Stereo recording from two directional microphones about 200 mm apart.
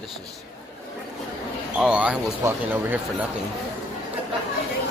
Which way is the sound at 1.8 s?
5° right (ahead or behind).